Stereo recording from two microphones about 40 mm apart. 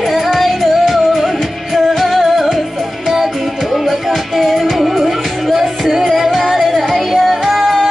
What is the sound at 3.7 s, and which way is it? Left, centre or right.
Music, centre.